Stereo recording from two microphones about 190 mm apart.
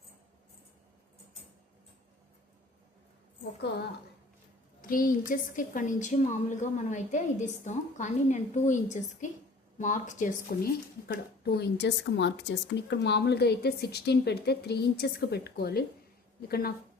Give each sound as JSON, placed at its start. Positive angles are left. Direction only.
{"t": 4.8, "sound": "a woman's voice", "side_deg": 45}
{"t": 11.1, "sound": "speech", "side_deg": 60}